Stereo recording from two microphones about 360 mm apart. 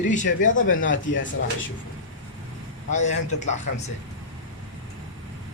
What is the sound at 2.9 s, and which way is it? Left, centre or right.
Speech, centre.